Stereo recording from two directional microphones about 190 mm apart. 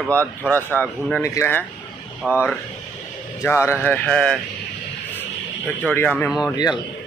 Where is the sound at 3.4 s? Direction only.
15° left (ahead or behind).